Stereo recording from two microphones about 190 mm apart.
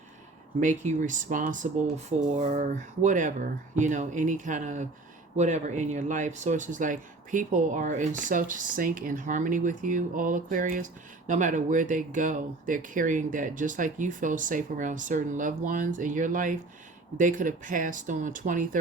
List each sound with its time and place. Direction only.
0.6 s speech: 40° right (ahead or behind)